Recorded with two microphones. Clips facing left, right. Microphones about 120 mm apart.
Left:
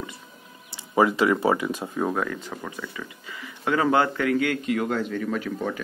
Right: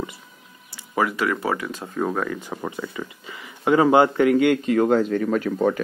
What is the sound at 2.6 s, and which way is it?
Speech, 25° right (ahead or behind).